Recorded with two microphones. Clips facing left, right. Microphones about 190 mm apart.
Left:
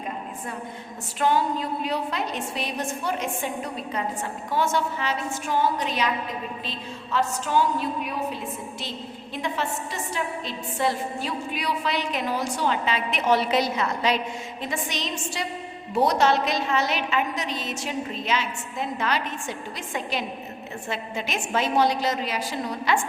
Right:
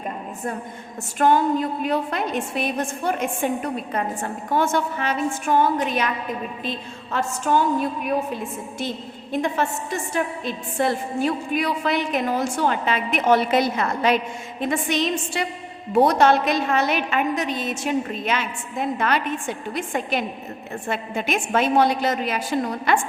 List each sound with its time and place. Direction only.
1.2 s a woman's voice: 50° right (ahead or behind)